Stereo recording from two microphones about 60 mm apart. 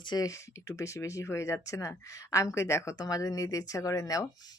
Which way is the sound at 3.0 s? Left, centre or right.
Left.